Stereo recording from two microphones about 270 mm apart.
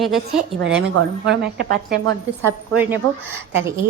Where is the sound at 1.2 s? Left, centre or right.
Right.